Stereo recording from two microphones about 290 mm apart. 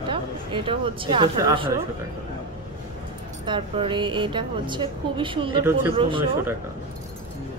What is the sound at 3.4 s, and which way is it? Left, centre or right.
Speech, centre.